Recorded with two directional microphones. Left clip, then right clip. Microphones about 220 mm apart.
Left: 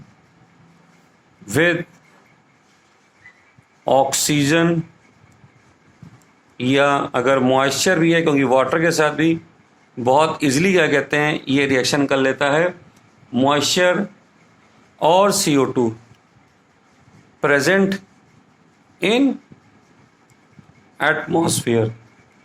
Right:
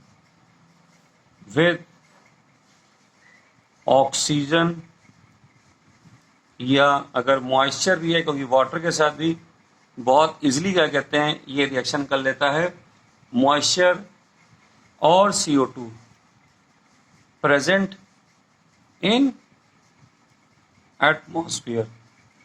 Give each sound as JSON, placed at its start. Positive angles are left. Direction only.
{"t": 1.5, "sound": "speech", "side_deg": 40}
{"t": 3.8, "sound": "speech", "side_deg": 40}
{"t": 6.6, "sound": "speech", "side_deg": 40}
{"t": 17.4, "sound": "speech", "side_deg": 40}
{"t": 21.0, "sound": "speech", "side_deg": 40}